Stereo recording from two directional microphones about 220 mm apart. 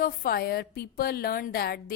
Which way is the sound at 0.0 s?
45° left (ahead or behind).